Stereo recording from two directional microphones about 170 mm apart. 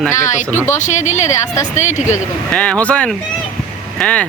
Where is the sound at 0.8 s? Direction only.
45° left (ahead or behind).